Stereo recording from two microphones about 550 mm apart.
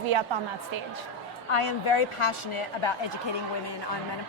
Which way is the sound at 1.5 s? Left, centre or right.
Left.